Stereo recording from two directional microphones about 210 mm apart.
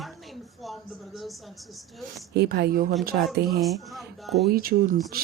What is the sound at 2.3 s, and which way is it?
Speech, 50° right (ahead or behind).